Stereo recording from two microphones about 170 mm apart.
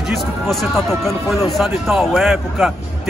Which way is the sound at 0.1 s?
Centre (ahead or behind).